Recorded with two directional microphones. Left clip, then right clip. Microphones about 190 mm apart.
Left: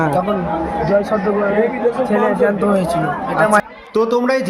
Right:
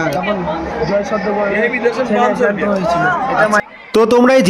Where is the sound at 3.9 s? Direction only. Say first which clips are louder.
Right 6 dB; 50° right (ahead or behind).